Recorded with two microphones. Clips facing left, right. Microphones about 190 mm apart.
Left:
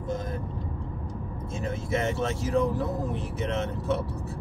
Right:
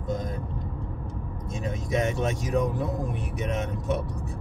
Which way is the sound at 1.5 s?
15° right (ahead or behind).